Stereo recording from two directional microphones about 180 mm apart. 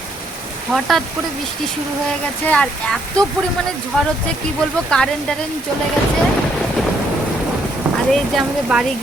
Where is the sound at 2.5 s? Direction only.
5° left (ahead or behind).